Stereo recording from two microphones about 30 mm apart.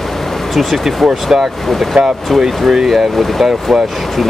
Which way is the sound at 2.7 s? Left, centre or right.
Centre.